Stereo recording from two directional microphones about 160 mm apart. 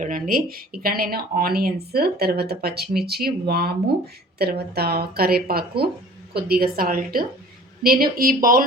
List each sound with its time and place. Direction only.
0.0 s speech: 60° right (ahead or behind)